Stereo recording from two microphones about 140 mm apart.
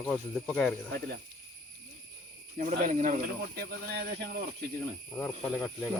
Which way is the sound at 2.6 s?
60° right (ahead or behind).